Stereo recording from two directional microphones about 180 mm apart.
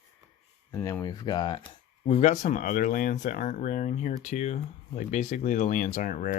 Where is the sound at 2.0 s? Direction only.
40° left (ahead or behind).